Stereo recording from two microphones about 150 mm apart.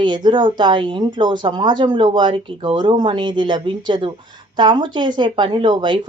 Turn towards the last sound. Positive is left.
turn(degrees=-30)  # may be behind; listen again after turning